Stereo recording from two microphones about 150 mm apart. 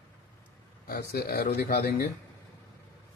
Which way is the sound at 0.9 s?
90° left.